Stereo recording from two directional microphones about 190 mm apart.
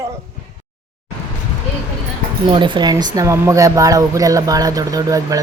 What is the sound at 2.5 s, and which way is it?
Speech, 25° right (ahead or behind).